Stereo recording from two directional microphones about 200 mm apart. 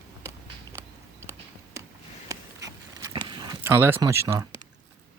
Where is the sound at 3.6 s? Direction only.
10° right (ahead or behind).